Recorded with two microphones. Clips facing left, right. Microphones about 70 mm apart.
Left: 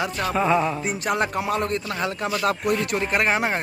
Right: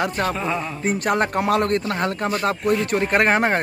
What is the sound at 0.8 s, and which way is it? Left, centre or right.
Speech, right.